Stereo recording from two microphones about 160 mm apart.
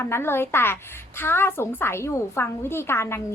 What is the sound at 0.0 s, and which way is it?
A woman's voice, 15° left (ahead or behind).